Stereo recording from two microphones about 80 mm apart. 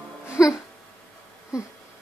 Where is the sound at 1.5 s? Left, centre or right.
Centre.